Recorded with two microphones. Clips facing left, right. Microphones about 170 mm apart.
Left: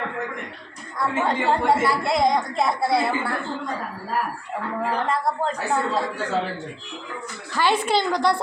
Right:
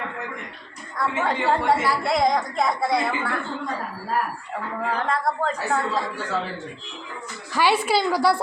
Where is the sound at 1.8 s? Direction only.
Centre (ahead or behind).